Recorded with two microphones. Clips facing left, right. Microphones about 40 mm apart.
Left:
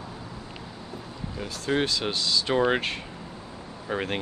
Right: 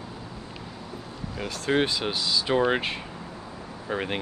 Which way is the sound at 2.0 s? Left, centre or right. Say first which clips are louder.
Even; centre.